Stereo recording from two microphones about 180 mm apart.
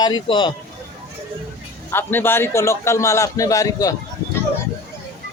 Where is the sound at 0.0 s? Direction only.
25° left (ahead or behind).